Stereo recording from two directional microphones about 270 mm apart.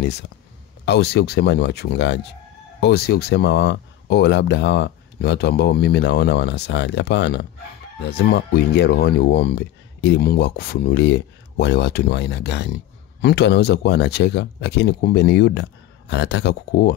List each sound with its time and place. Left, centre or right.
0.8 s speech: left